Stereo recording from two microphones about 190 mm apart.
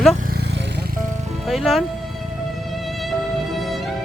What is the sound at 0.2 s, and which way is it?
Vehicle, 55° right (ahead or behind).